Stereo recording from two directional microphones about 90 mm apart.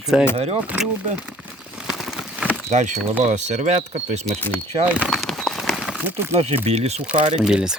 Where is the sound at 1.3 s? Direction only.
10° right (ahead or behind).